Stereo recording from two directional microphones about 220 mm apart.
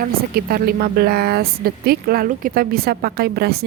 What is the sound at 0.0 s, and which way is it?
A woman's voice, 45° right (ahead or behind).